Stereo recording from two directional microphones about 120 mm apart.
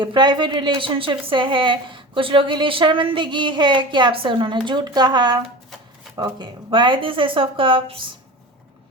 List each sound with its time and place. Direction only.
0.0 s a woman's voice: 40° right (ahead or behind)